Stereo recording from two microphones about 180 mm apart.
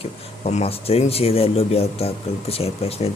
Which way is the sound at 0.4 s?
35° left (ahead or behind).